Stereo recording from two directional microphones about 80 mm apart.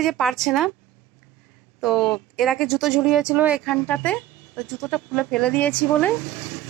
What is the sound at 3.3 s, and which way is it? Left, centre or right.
Speech, centre.